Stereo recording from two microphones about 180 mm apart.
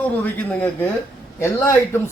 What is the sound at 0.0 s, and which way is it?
Speech, 10° left (ahead or behind).